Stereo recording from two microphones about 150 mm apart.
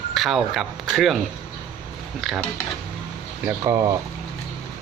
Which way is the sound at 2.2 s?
Centre (ahead or behind).